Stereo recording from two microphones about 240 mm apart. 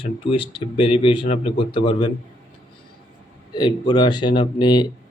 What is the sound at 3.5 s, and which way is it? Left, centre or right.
A man's voice, centre.